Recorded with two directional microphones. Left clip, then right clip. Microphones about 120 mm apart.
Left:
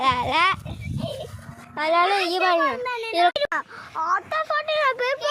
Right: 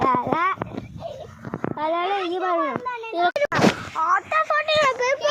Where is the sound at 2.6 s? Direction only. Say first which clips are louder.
Left 2 dB; 30° left (ahead or behind).